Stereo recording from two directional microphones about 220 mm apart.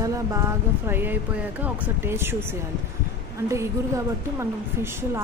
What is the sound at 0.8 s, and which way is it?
Speech, 10° right (ahead or behind).